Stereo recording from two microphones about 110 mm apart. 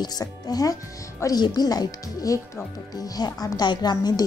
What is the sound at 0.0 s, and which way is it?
Speech, 35° left (ahead or behind).